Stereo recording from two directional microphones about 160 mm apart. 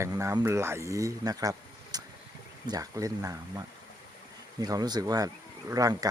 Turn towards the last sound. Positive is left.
turn(degrees=-20)  # may be behind; listen again after turning